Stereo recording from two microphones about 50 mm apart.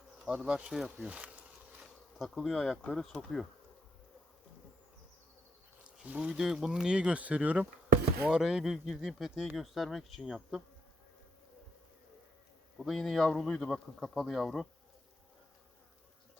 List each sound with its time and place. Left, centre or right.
0.3 s speech: centre
1.0 s bee: right
1.8 s bee: centre
2.3 s speech: centre
6.0 s speech: right
6.3 s speech: centre; by 7.7 s right
8.3 s speech: centre
12.7 s speech: centre